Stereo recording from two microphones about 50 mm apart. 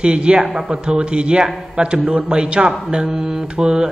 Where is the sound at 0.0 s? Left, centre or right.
Right.